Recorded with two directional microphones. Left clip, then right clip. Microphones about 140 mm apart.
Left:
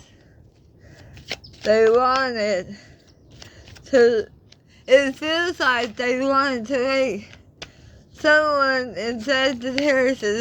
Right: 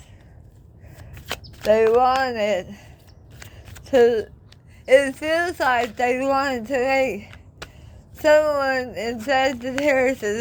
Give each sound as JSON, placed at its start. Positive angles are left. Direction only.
{"t": 1.9, "sound": "speech", "side_deg": 35}
{"t": 3.5, "sound": "a sound", "side_deg": 35}
{"t": 4.9, "sound": "speech", "side_deg": 40}